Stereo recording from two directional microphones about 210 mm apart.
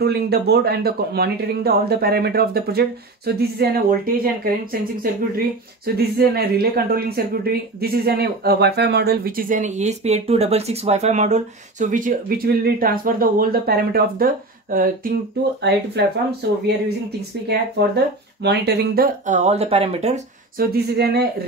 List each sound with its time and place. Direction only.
0.0 s speech: 50° right (ahead or behind)
15.6 s speech: 55° right (ahead or behind)
18.4 s speech: 50° right (ahead or behind)
19.2 s speech: 35° right (ahead or behind)
20.5 s speech: 50° right (ahead or behind)